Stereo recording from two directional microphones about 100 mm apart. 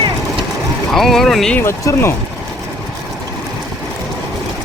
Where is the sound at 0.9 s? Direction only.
Centre (ahead or behind).